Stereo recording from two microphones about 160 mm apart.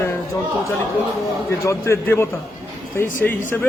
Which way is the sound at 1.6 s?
15° left (ahead or behind).